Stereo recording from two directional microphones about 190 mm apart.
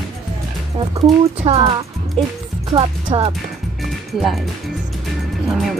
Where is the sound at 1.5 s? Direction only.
30° right (ahead or behind).